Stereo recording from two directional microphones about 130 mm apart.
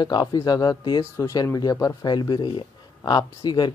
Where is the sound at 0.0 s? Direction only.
30° left (ahead or behind).